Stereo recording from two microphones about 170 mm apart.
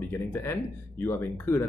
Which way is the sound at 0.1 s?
15° left (ahead or behind).